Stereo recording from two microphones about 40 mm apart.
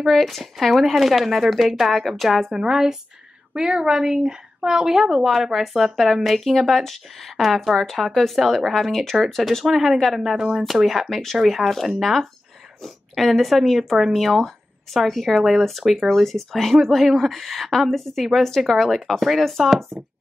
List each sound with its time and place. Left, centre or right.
0.0 s speech: centre
2.5 s a woman's voice: centre
11.1 s speech: centre
11.3 s speech: centre